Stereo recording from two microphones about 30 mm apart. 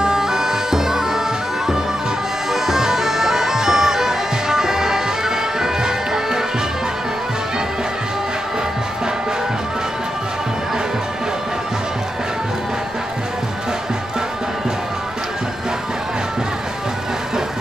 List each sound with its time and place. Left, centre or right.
0.0 s bagpipes: right
2.5 s bagpipes: centre